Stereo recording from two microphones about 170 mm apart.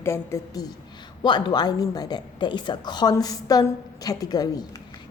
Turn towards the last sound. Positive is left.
turn(degrees=20)  # may be behind; listen again after turning